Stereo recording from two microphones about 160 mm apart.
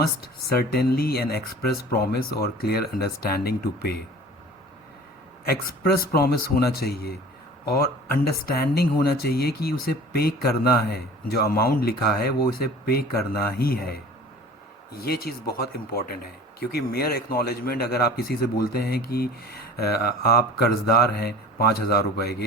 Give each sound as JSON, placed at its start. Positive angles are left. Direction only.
{"t": 0.4, "sound": "speech", "side_deg": 75}
{"t": 5.5, "sound": "speech", "side_deg": 70}
{"t": 15.0, "sound": "speech", "side_deg": 70}